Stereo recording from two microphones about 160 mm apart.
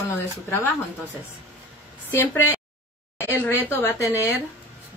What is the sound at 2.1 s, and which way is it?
Speech, 15° left (ahead or behind).